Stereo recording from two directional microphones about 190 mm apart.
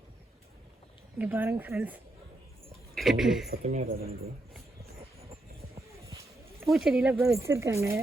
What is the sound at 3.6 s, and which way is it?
Speech, 35° right (ahead or behind).